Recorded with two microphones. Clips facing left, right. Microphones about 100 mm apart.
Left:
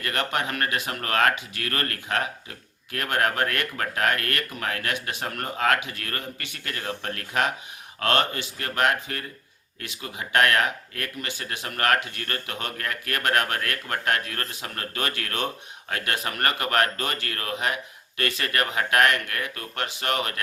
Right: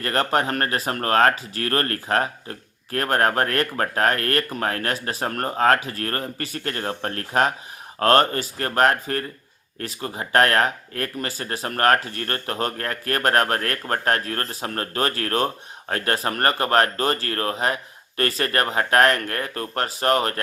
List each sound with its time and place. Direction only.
0.0 s speech: 35° right (ahead or behind)